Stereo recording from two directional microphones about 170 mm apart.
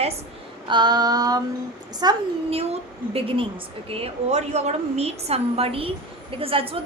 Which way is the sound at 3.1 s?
30° right (ahead or behind).